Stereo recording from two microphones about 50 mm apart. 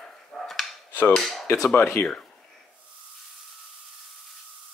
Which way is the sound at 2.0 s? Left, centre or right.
Left.